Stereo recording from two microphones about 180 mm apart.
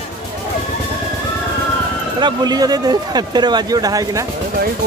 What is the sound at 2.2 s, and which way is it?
Speech, 20° right (ahead or behind).